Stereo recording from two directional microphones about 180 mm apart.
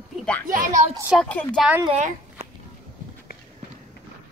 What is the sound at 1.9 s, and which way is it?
Speech, 40° right (ahead or behind).